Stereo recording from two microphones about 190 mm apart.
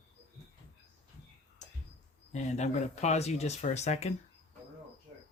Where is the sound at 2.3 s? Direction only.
40° left (ahead or behind).